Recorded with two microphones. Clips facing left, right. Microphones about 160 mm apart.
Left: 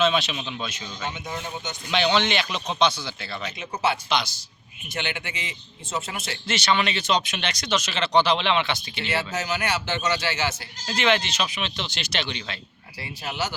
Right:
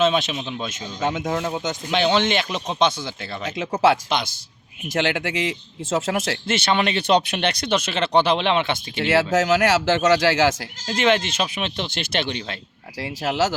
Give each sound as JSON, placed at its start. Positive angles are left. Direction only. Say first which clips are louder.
{"t": 0.0, "sound": "speech", "louder": "right 3 dB", "side_deg": -45}
{"t": 1.1, "sound": "speech", "louder": "right 9 dB", "side_deg": -85}
{"t": 2.1, "sound": "speech", "louder": "right 3 dB", "side_deg": -45}
{"t": 3.6, "sound": "speech", "louder": "right 8 dB", "side_deg": -90}
{"t": 4.1, "sound": "speech", "louder": "right 1 dB", "side_deg": -50}
{"t": 4.9, "sound": "speech", "louder": "right 10 dB", "side_deg": -90}
{"t": 6.5, "sound": "speech", "louder": "right 2 dB", "side_deg": -55}
{"t": 9.0, "sound": "speech", "louder": "right 10 dB", "side_deg": -90}
{"t": 10.8, "sound": "speech", "louder": "right 3 dB", "side_deg": -45}
{"t": 13.0, "sound": "speech", "louder": "right 8 dB", "side_deg": -90}